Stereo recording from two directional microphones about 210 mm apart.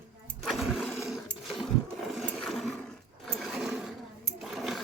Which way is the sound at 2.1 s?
5° left (ahead or behind).